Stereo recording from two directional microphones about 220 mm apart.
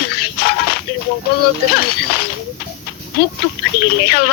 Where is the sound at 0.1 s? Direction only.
45° left (ahead or behind).